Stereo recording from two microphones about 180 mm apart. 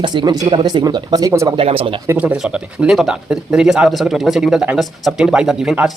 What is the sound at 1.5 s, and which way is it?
Speech, 30° right (ahead or behind).